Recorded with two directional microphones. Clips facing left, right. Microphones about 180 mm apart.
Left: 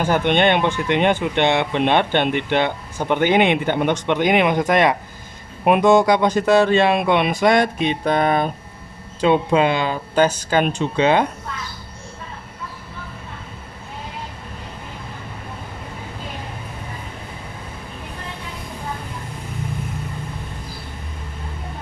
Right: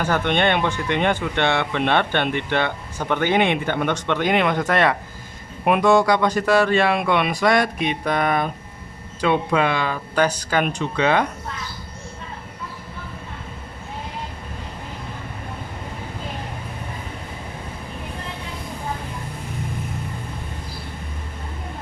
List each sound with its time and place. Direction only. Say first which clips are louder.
0.0 s speech: left 3 dB; 20° left (ahead or behind)